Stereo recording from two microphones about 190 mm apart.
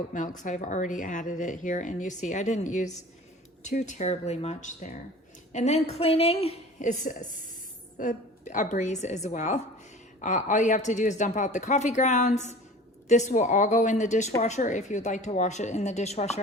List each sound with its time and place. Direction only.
0.1 s speech: 40° left (ahead or behind)